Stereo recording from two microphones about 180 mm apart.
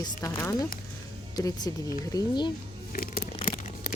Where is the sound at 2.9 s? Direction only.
55° left (ahead or behind).